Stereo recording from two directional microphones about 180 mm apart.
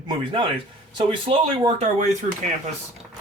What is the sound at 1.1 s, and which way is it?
Speech, 30° right (ahead or behind).